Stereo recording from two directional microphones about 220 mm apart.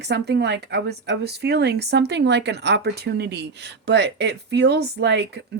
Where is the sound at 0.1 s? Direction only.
50° right (ahead or behind).